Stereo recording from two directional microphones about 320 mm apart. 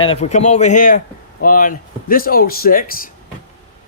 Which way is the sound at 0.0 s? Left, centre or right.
Centre.